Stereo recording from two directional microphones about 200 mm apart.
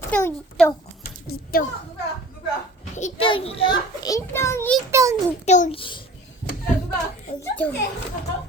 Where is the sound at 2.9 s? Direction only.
30° left (ahead or behind); by 4.7 s 10° left (ahead or behind).